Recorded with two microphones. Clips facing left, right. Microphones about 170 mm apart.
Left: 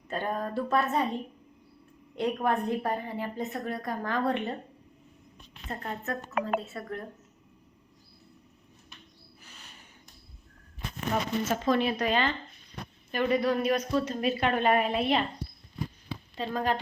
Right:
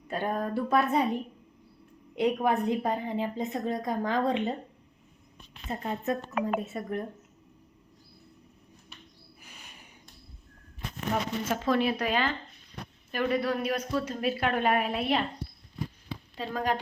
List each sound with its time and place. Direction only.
0.1 s a woman's voice: 10° right (ahead or behind)
2.1 s a woman's voice: 10° right (ahead or behind)
5.6 s a woman's voice: 15° right (ahead or behind)
11.1 s a woman's voice: 5° right (ahead or behind)
16.4 s a woman's voice: 10° right (ahead or behind)